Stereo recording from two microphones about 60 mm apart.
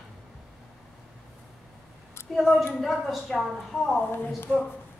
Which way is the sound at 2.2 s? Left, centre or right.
Left.